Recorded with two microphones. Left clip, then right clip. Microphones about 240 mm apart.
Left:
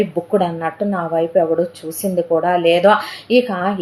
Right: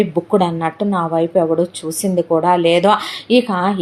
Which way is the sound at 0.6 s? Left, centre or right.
Right.